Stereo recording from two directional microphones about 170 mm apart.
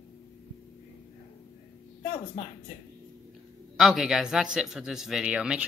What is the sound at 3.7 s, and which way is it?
Speech, centre (ahead or behind).